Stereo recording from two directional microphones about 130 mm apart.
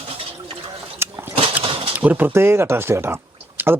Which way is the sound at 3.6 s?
15° right (ahead or behind).